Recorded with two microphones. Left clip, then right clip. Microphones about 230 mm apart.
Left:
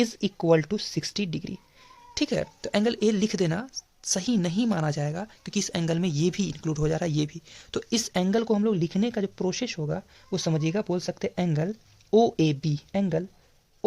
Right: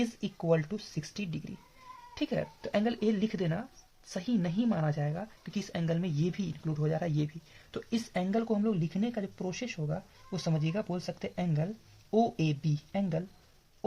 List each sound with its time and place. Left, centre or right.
0.0 s speech: left